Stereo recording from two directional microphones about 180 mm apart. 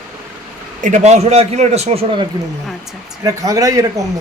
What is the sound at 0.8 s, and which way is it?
A man's voice, 45° right (ahead or behind).